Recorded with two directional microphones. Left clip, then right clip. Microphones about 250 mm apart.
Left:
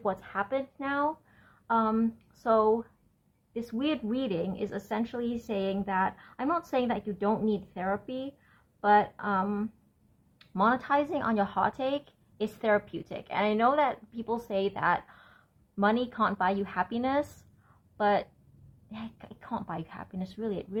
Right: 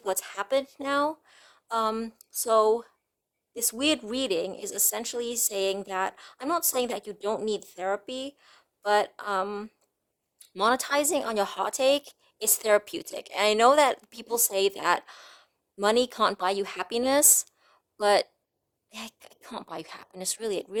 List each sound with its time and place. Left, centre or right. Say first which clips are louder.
0.0 s a woman's voice: even; right